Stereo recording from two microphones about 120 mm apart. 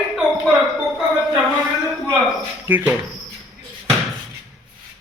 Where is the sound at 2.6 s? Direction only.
15° right (ahead or behind).